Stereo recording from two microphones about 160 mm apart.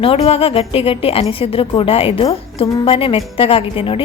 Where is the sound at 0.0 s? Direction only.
35° left (ahead or behind).